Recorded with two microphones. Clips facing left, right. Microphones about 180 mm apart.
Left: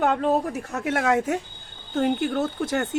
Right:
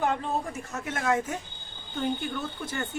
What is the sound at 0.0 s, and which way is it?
Speech, 70° left (ahead or behind).